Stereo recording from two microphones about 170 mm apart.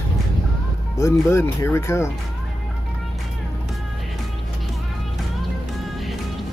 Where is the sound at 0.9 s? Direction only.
15° left (ahead or behind).